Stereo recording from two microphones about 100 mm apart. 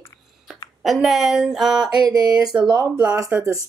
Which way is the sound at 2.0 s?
40° right (ahead or behind).